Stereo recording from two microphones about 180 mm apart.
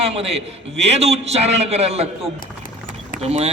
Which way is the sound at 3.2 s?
35° right (ahead or behind).